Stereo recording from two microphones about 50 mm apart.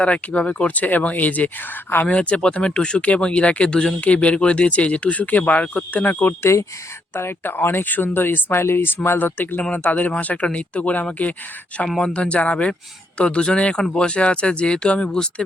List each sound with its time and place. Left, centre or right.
0.0 s speech: left
2.0 s speech: left
6.4 s speech: left
7.1 s speech: left
8.5 s speech: left; by 15.4 s centre